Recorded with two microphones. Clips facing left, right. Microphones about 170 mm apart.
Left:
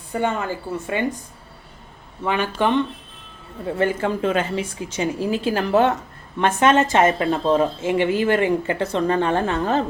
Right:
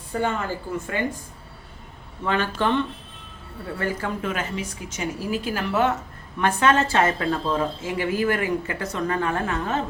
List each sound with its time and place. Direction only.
0.1 s speech: 20° left (ahead or behind)
2.2 s speech: 15° left (ahead or behind); by 5.9 s 30° left (ahead or behind)
6.4 s speech: 20° left (ahead or behind)